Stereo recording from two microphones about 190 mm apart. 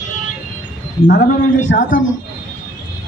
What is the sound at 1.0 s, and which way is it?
Speech, 50° left (ahead or behind).